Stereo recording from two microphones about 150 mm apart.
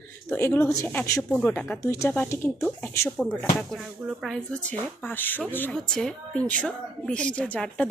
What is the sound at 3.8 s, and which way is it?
Speech, 5° right (ahead or behind).